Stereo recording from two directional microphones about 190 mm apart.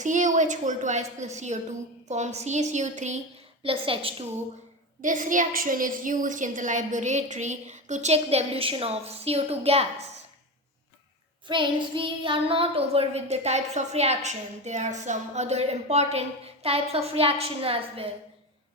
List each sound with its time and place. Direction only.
0.0 s a woman's voice: 40° right (ahead or behind)
5.0 s a woman's voice: 45° right (ahead or behind)
11.4 s a woman's voice: 25° right (ahead or behind)